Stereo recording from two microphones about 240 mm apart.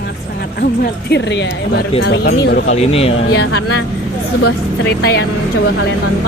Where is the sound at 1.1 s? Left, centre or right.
Left.